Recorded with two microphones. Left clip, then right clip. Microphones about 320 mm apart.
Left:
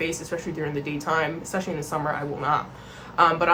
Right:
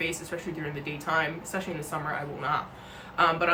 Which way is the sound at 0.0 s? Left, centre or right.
Centre.